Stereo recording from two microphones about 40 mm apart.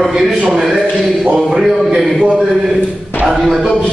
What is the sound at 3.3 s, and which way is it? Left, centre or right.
Speech, centre.